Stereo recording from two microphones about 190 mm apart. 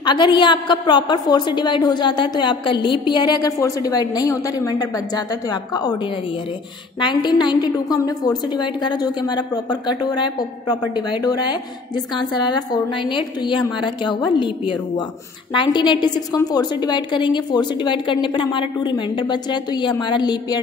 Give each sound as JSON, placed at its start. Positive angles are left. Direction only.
{"t": 0.0, "sound": "a woman's voice", "side_deg": 25}
{"t": 7.0, "sound": "a woman's voice", "side_deg": 25}
{"t": 15.5, "sound": "a woman's voice", "side_deg": 25}